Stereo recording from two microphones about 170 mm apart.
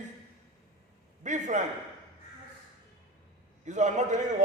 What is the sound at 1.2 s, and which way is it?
Speech, 45° right (ahead or behind).